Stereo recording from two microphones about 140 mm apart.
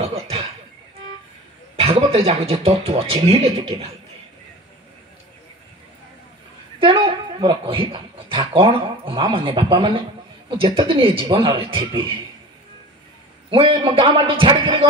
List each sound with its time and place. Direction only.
0.0 s a sound: 45° right (ahead or behind)
1.8 s speech: 45° right (ahead or behind)
6.8 s a man's voice: 40° right (ahead or behind)
13.5 s a man's voice: 40° right (ahead or behind)